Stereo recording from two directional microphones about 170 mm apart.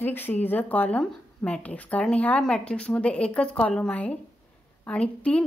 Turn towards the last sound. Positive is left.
turn(degrees=5)  # may be behind; listen again after turning